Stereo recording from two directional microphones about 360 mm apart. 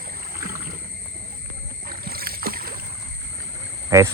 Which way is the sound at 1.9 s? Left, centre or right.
Right.